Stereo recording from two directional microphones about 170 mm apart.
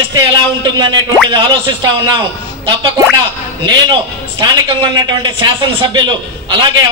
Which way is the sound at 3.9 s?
25° right (ahead or behind).